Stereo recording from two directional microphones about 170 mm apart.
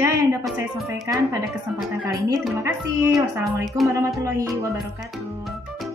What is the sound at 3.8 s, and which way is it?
Speech, 20° right (ahead or behind).